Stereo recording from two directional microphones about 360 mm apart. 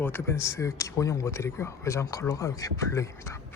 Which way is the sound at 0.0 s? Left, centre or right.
Centre.